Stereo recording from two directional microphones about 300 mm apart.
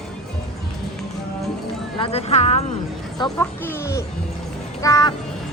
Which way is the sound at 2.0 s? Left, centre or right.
Left.